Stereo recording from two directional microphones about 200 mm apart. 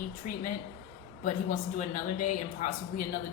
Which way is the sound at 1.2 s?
40° left (ahead or behind).